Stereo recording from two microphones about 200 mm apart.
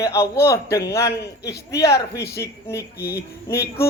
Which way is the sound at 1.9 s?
55° left (ahead or behind).